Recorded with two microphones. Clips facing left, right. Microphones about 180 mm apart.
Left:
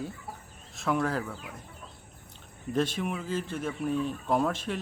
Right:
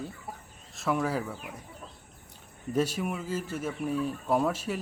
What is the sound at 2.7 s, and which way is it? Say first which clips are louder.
Speech: even; 10° right (ahead or behind).